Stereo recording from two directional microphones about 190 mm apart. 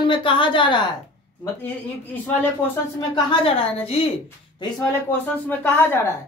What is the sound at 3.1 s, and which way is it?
Speech, 25° left (ahead or behind).